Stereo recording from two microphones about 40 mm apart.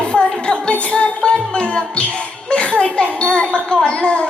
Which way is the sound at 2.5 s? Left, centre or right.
Left.